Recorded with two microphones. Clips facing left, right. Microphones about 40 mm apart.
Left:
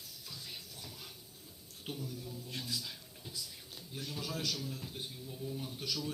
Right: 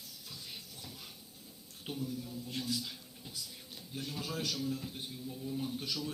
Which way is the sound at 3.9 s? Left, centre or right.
Centre.